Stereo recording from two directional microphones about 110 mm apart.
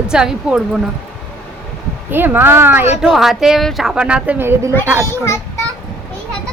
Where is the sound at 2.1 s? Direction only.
20° right (ahead or behind).